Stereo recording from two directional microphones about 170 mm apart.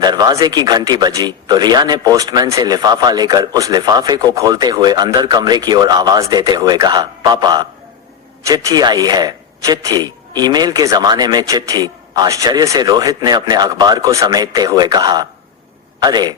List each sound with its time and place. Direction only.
0.0 s speech: 25° right (ahead or behind)